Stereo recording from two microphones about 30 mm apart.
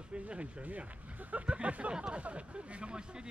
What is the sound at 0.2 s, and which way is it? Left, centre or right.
Speech, right.